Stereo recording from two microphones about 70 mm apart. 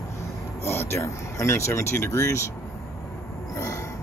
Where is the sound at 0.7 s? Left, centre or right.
Left.